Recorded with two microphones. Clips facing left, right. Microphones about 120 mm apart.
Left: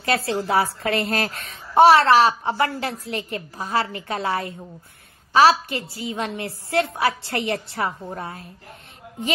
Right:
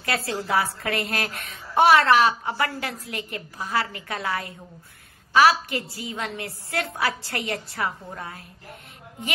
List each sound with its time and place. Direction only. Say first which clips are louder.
0.0 s a woman's voice: left 5 dB; 25° left (ahead or behind)